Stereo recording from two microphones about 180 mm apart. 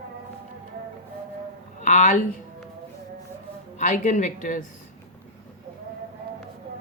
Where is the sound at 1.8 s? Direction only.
45° left (ahead or behind).